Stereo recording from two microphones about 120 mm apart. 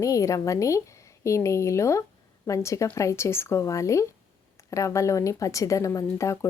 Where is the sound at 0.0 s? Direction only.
25° left (ahead or behind).